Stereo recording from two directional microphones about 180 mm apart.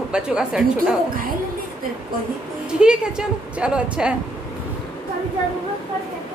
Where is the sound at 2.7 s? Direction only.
5° right (ahead or behind).